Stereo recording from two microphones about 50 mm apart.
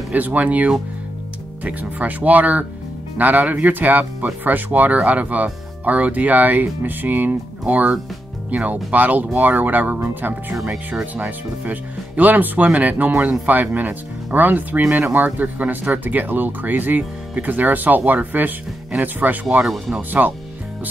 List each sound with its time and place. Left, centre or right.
0.1 s speech: right
10.5 s speech: centre
11.1 s speech: right